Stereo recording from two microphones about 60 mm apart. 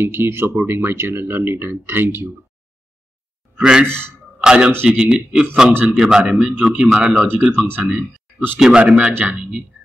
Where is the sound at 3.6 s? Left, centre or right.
Centre.